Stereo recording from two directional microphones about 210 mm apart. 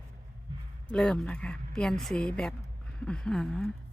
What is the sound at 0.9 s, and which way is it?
A woman's voice, 5° left (ahead or behind).